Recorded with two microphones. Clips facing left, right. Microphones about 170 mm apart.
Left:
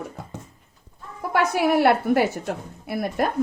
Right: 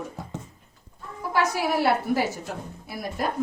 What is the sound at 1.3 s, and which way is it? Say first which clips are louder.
A woman's voice: left 4 dB; 60° left (ahead or behind).